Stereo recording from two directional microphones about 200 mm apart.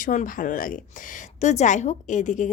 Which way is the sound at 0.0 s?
40° left (ahead or behind).